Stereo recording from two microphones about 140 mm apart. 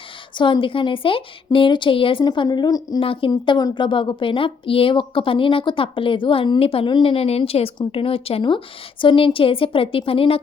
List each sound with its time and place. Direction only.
0.3 s a woman's voice: 35° left (ahead or behind)
3.0 s a woman's voice: 40° left (ahead or behind)